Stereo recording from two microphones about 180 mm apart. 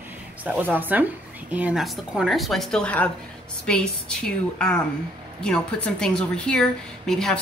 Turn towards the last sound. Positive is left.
turn(degrees=0)  # may be behind; listen again after turning